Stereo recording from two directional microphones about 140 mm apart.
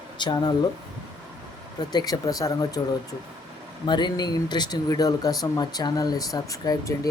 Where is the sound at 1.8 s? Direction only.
30° left (ahead or behind).